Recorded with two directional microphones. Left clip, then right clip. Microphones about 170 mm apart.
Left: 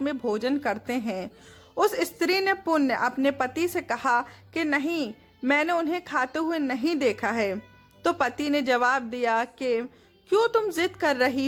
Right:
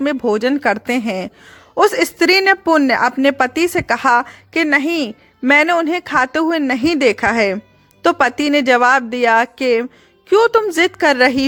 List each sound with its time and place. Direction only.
0.0 s a woman's voice: 40° right (ahead or behind)